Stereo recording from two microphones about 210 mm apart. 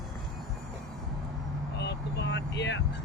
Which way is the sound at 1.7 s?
55° left (ahead or behind).